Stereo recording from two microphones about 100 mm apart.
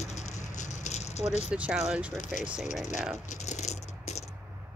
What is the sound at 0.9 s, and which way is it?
Rattle, 90° left.